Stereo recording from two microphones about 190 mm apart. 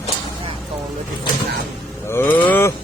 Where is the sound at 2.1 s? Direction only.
10° left (ahead or behind).